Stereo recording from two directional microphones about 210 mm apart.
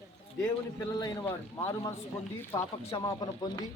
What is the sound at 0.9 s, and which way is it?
Speech, 20° left (ahead or behind).